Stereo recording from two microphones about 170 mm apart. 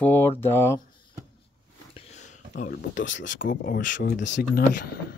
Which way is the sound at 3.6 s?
50° left (ahead or behind).